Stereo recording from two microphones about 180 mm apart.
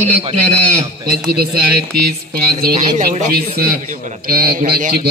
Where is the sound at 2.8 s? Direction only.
45° right (ahead or behind).